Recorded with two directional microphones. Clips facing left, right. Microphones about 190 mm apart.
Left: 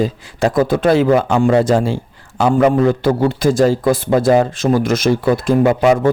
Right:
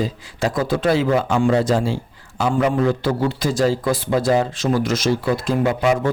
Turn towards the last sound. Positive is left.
turn(degrees=50)  # may be behind; listen again after turning